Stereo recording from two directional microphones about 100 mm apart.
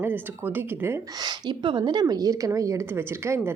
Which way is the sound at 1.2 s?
45° right (ahead or behind).